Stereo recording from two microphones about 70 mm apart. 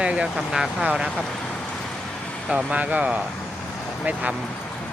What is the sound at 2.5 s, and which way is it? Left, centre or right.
Speech, centre.